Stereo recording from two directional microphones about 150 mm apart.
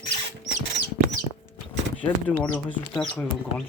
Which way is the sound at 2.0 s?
10° left (ahead or behind).